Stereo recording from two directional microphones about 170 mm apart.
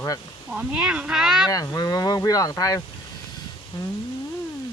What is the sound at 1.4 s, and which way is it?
Speech, 20° left (ahead or behind).